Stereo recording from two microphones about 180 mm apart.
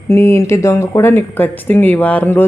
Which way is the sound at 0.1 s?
15° left (ahead or behind).